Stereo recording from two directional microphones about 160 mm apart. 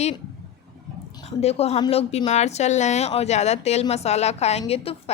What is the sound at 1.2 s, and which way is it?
Speech, 40° left (ahead or behind).